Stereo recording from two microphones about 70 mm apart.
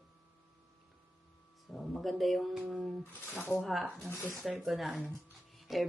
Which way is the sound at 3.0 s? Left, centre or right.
Left.